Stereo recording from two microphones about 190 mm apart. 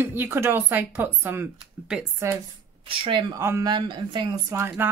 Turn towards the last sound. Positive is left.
turn(degrees=-10)  # may be behind; listen again after turning